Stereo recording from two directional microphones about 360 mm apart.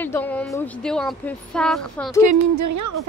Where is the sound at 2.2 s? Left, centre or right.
Right.